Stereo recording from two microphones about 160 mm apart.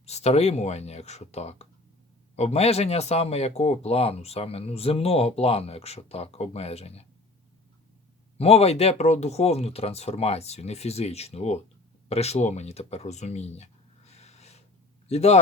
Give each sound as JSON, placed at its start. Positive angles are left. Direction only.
{"t": 0.0, "sound": "speech", "side_deg": 45}
{"t": 8.4, "sound": "a man's voice", "side_deg": 40}